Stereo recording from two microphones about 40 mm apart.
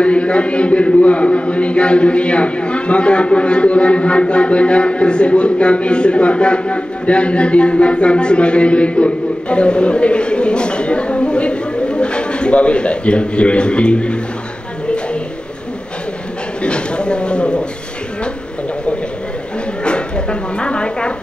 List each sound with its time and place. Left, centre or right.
0.0 s a man's voice: left
16.6 s a sound: left
19.8 s dog: left